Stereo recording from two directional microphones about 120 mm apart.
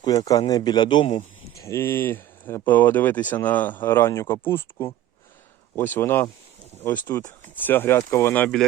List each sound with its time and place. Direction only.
0.0 s a man's voice: 30° left (ahead or behind)
1.5 s speech: 25° left (ahead or behind)